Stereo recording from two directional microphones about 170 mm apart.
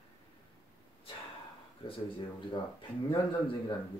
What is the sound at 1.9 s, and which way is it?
Speech, 30° left (ahead or behind).